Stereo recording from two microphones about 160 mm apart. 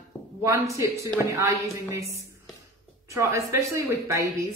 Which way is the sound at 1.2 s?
20° right (ahead or behind).